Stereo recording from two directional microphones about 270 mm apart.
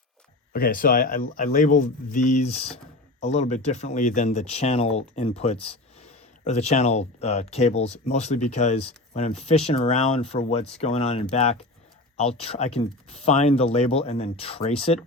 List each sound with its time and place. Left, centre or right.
0.5 s speech: left